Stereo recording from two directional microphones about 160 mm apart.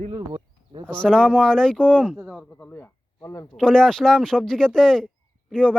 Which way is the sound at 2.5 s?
10° left (ahead or behind).